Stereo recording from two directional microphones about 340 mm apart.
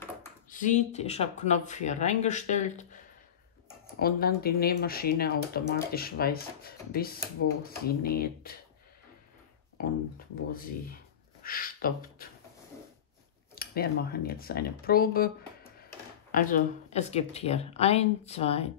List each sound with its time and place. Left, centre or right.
0.5 s speech: left
4.0 s speech: left
10.1 s speech: left
13.6 s speech: left